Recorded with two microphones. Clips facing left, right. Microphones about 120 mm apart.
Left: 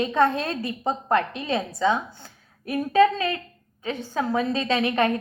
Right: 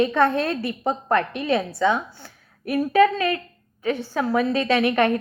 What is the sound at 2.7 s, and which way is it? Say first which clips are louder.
A woman's voice: right 1 dB; 20° left (ahead or behind).